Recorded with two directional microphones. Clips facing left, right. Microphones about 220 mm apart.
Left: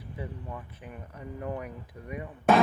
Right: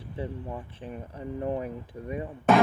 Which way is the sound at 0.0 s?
30° right (ahead or behind).